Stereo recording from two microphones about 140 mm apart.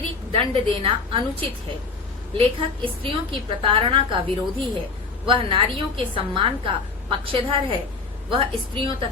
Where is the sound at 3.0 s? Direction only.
40° right (ahead or behind).